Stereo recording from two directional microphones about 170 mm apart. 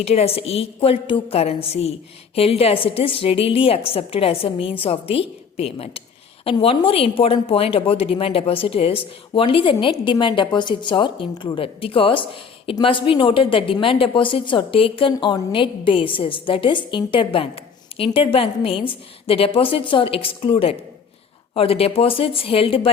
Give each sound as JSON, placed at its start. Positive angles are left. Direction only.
{"t": 0.0, "sound": "a woman's voice", "side_deg": 35}